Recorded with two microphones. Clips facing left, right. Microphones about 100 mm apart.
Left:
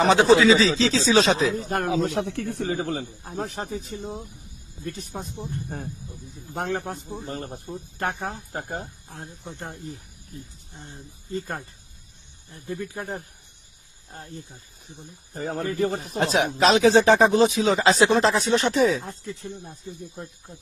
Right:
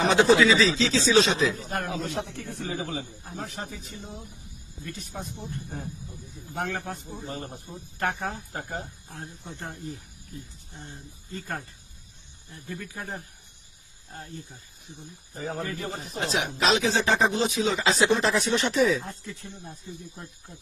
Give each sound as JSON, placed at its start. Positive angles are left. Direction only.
{"t": 0.3, "sound": "speech", "side_deg": 30}
{"t": 1.9, "sound": "speech", "side_deg": 85}
{"t": 3.2, "sound": "speech", "side_deg": 40}
{"t": 5.6, "sound": "speech", "side_deg": 50}
{"t": 6.5, "sound": "speech", "side_deg": 30}
{"t": 7.3, "sound": "speech", "side_deg": 50}
{"t": 7.9, "sound": "speech", "side_deg": 25}
{"t": 9.1, "sound": "speech", "side_deg": 20}
{"t": 11.3, "sound": "speech", "side_deg": 25}
{"t": 15.4, "sound": "speech", "side_deg": 60}